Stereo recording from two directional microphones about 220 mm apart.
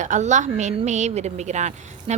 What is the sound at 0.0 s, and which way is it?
A woman's voice, 35° right (ahead or behind).